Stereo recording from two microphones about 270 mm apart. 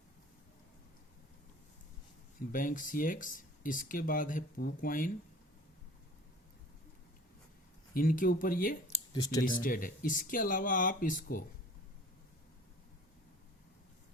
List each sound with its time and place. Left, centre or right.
2.5 s speech: left
7.9 s speech: left
8.9 s clicking: centre
9.4 s speech: left